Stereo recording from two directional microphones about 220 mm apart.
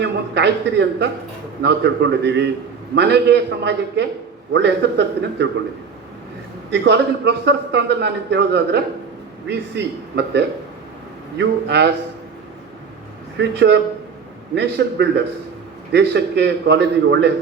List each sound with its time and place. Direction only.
0.0 s a man's voice: 50° right (ahead or behind)
6.8 s a man's voice: 50° right (ahead or behind)
13.4 s a man's voice: 50° right (ahead or behind)